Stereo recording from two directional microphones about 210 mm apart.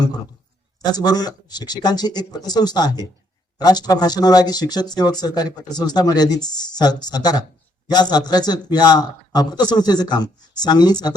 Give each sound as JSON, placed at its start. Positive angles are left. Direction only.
{"t": 0.8, "sound": "speech", "side_deg": 20}